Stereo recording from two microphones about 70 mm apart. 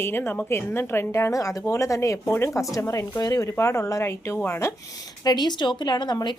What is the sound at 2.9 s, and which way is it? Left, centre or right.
Speech, left.